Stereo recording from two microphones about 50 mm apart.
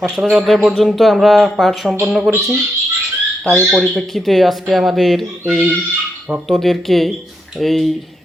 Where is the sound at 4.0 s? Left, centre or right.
Centre.